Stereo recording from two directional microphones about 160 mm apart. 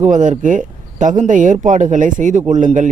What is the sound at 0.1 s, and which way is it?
Speech, 55° right (ahead or behind).